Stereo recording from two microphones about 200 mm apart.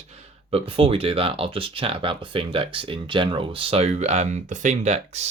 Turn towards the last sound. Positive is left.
turn(degrees=-35)  # may be behind; listen again after turning